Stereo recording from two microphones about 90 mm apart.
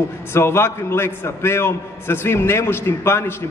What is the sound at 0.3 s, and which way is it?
A man's voice, 30° left (ahead or behind).